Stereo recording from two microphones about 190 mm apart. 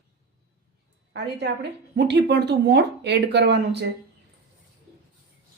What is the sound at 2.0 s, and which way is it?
A woman's voice, 65° right (ahead or behind).